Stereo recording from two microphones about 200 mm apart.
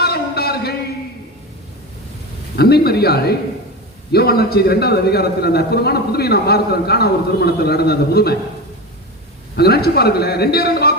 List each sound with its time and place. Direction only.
0.0 s a sound: 50° left (ahead or behind)
2.6 s a man's voice: 50° left (ahead or behind)
9.6 s a man's voice: 50° left (ahead or behind)